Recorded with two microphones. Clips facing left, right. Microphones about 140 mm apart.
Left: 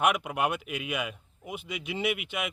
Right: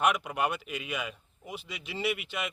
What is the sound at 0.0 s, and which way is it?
Speech, 10° left (ahead or behind).